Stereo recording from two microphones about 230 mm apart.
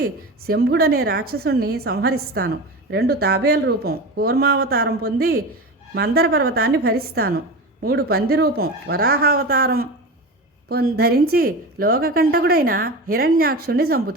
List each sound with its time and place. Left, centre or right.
0.0 s a woman's voice: right